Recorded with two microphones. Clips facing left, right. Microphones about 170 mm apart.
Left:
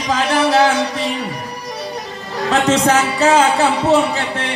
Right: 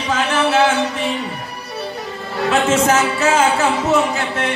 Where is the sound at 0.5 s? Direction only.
35° left (ahead or behind).